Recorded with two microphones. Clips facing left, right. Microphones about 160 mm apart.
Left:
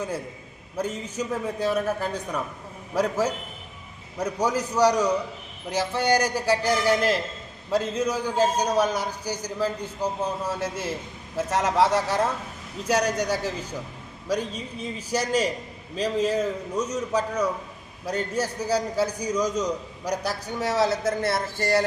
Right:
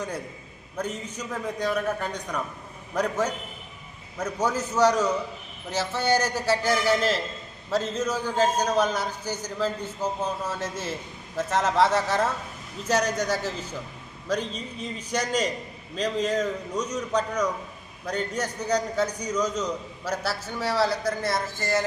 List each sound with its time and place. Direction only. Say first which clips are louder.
1.1 s a man's voice: left 3 dB; 30° left (ahead or behind)
2.9 s a man's voice: left 2 dB; 10° left (ahead or behind); by 21.8 s 30° left (ahead or behind)